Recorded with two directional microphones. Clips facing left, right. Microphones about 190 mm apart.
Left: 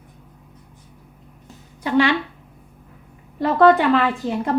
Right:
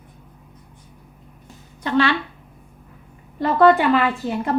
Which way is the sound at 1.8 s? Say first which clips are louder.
Left 1 dB; 15° left (ahead or behind).